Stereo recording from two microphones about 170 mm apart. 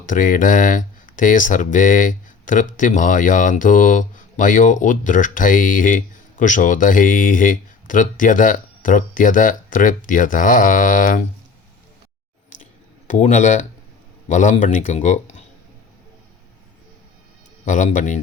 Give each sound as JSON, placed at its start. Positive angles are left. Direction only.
{"t": 0.0, "sound": "speech", "side_deg": 50}
{"t": 13.1, "sound": "speech", "side_deg": 45}
{"t": 17.7, "sound": "speech", "side_deg": 50}